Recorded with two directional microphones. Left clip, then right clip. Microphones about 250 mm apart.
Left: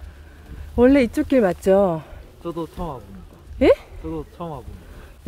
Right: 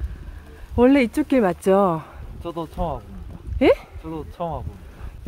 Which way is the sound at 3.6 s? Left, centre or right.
Centre.